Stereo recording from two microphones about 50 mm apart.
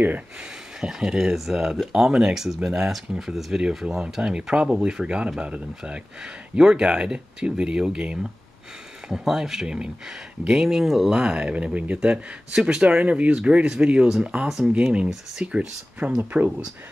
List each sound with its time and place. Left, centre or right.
0.7 s speech: centre
9.1 s speech: centre
11.1 s speech: centre
16.2 s speech: right